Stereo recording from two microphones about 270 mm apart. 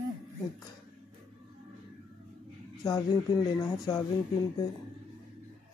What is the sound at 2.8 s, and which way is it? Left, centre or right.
Speech, centre.